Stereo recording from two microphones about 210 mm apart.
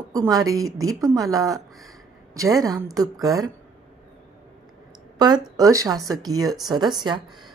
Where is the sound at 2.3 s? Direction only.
15° right (ahead or behind).